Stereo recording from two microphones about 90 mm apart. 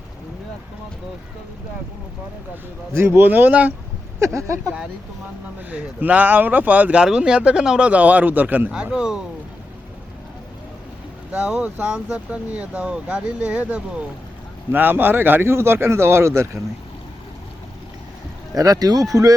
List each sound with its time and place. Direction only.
2.9 s speech: 30° right (ahead or behind)
4.4 s speech: 35° right (ahead or behind)
5.7 s speech: 15° right (ahead or behind)
11.3 s speech: 10° right (ahead or behind); by 16.5 s 30° right (ahead or behind)
18.5 s speech: 45° right (ahead or behind)